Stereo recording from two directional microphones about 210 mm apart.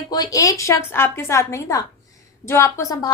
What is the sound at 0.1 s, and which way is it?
A woman's voice, 20° left (ahead or behind).